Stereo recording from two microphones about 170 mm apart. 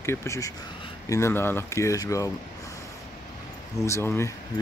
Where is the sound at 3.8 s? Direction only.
15° left (ahead or behind).